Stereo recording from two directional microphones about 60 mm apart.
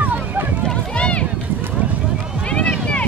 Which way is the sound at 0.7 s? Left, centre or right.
Centre.